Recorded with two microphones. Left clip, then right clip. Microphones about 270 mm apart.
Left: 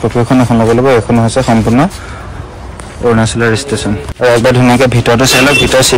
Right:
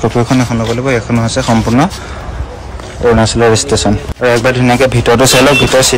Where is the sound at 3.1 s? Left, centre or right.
Centre.